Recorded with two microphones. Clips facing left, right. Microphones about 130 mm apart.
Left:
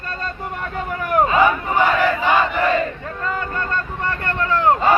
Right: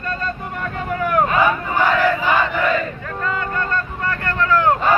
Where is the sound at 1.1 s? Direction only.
20° left (ahead or behind).